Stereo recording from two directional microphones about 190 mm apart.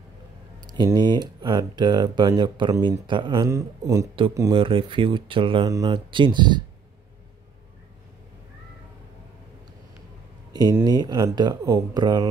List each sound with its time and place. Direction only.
0.7 s speech: 20° right (ahead or behind)
10.5 s speech: 20° right (ahead or behind)